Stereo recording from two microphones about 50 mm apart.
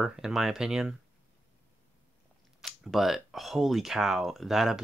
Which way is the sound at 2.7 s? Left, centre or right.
Centre.